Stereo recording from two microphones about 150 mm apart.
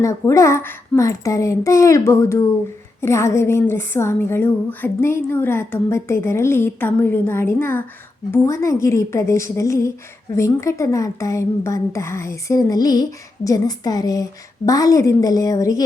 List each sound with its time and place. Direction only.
0.0 s a woman's voice: 20° left (ahead or behind)